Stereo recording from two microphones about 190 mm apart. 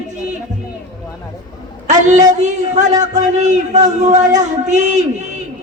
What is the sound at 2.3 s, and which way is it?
Speech, 40° right (ahead or behind).